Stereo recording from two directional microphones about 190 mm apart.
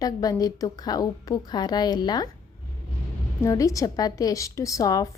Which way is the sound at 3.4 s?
15° left (ahead or behind).